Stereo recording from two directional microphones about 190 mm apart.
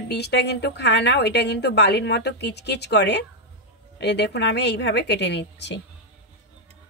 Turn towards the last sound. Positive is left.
turn(degrees=65)  # may be behind; listen again after turning